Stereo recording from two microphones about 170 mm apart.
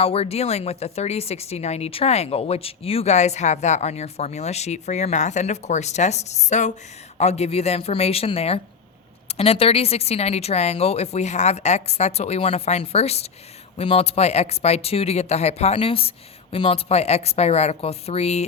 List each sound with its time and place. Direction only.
0.0 s speech: 35° left (ahead or behind)